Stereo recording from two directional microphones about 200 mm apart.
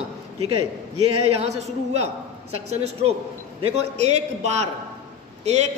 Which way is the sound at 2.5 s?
30° right (ahead or behind).